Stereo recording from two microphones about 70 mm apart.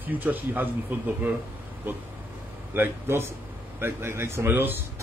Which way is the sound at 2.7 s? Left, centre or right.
Right.